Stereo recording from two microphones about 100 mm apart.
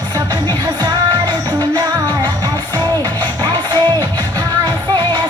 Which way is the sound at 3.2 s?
45° right (ahead or behind).